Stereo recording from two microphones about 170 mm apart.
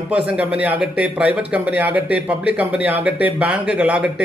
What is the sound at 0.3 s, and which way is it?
Speech, 10° right (ahead or behind).